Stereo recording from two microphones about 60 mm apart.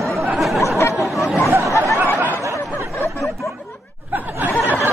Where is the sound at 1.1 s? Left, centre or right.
Centre.